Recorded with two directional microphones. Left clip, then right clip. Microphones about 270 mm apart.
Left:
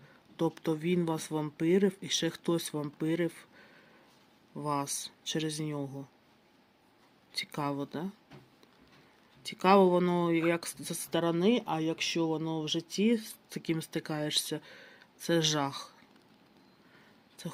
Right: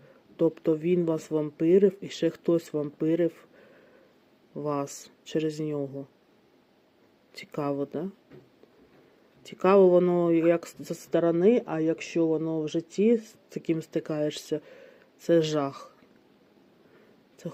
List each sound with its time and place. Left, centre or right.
0.3 s speech: centre
7.3 s speech: centre
9.4 s speech: centre